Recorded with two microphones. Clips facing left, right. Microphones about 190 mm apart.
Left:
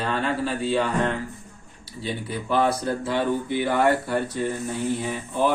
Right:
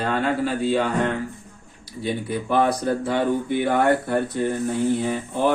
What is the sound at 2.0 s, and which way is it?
Speech, 55° right (ahead or behind).